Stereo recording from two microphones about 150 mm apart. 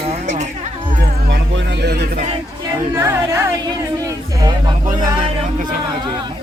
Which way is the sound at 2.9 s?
15° right (ahead or behind).